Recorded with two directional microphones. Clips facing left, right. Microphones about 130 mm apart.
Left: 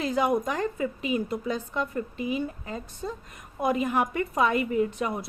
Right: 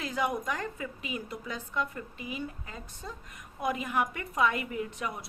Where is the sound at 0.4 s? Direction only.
25° left (ahead or behind).